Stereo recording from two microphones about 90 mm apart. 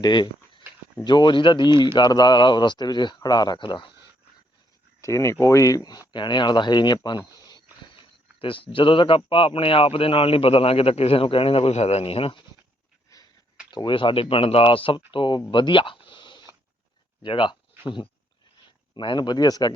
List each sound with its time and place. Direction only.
0.0 s a sound: 60° left (ahead or behind)
1.0 s speech: 55° left (ahead or behind)
2.0 s speech: 50° left (ahead or behind)
4.9 s speech: 35° left (ahead or behind)
6.1 s speech: 55° left (ahead or behind)
7.9 s speech: 75° left (ahead or behind)
13.1 s a sound: 35° left (ahead or behind)
13.7 s speech: 60° left (ahead or behind)
15.4 s a sound: 60° left (ahead or behind)
17.2 s speech: 60° left (ahead or behind)